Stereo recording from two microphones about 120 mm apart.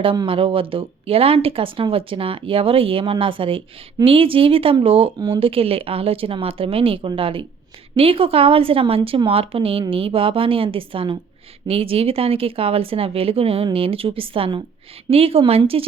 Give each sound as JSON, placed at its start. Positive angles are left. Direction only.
{"t": 0.3, "sound": "speech", "side_deg": -50}